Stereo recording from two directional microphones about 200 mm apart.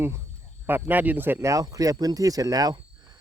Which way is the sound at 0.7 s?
10° right (ahead or behind).